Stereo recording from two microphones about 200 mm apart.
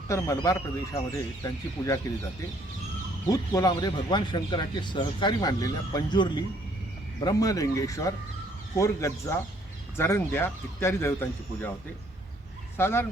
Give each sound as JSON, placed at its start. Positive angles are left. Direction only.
{"t": 0.1, "sound": "speech", "side_deg": 15}
{"t": 3.5, "sound": "speech", "side_deg": 20}
{"t": 12.7, "sound": "speech", "side_deg": 10}